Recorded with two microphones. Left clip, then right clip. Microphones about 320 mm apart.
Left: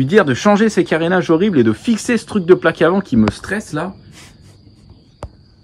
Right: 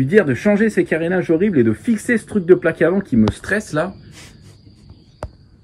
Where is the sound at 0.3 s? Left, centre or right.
Left.